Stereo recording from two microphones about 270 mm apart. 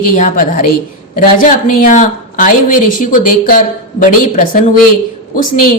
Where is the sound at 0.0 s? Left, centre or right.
Left.